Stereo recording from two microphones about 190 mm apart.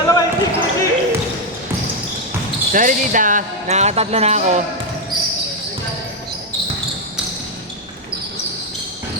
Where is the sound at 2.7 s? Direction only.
45° right (ahead or behind).